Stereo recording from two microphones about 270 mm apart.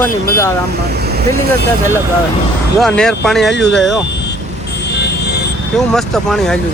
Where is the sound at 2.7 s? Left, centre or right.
Centre.